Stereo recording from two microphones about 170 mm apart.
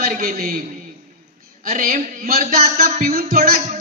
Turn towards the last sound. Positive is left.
turn(degrees=-60)  # may be behind; listen again after turning